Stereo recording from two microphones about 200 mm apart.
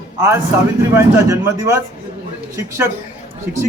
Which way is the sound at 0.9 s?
15° right (ahead or behind).